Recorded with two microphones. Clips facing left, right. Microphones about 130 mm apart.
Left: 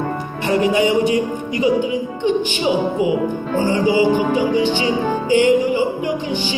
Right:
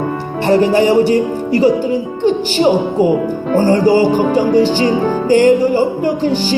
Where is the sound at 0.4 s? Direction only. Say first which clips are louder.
Right 5 dB; 30° right (ahead or behind).